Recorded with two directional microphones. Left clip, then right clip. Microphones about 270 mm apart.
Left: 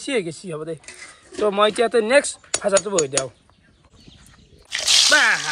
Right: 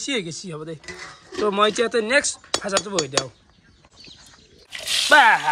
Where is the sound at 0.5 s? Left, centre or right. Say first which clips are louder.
Left 4 dB; centre.